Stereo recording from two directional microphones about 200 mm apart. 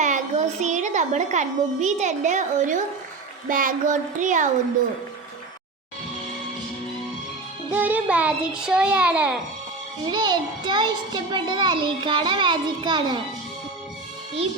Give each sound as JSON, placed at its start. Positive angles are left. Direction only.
{"t": 0.0, "sound": "a child's voice", "side_deg": -35}
{"t": 3.5, "sound": "a sound", "side_deg": -45}
{"t": 7.7, "sound": "a child's voice", "side_deg": -10}
{"t": 10.1, "sound": "a child's voice", "side_deg": -20}